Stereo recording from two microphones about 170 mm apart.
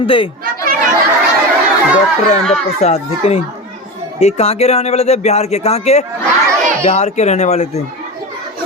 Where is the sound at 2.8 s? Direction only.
40° left (ahead or behind).